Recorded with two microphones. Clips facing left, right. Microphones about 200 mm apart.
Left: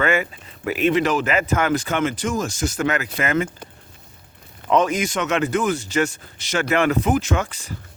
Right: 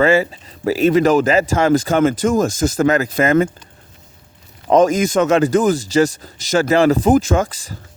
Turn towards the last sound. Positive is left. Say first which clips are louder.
# right 6 dB
turn(degrees=-40)  # may be behind; listen again after turning